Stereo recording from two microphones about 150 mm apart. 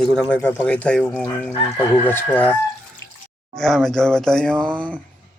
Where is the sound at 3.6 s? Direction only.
5° left (ahead or behind).